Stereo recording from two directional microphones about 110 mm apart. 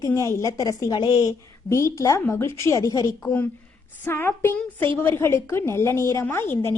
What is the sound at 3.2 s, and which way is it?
A woman's voice, 15° left (ahead or behind).